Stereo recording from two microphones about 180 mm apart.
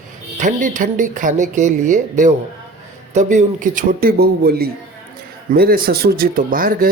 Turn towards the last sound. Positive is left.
turn(degrees=-50)  # may be behind; listen again after turning